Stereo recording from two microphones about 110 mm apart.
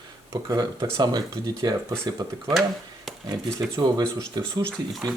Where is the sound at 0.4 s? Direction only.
35° right (ahead or behind).